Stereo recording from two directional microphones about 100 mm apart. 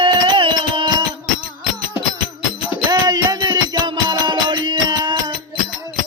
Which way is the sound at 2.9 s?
40° right (ahead or behind).